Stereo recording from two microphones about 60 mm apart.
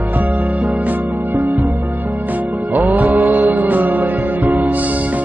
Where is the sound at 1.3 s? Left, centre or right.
Right.